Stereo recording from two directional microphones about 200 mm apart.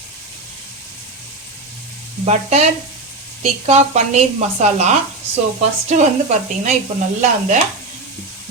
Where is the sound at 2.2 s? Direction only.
35° right (ahead or behind).